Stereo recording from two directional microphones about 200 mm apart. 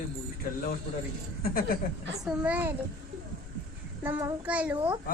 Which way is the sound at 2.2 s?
5° right (ahead or behind).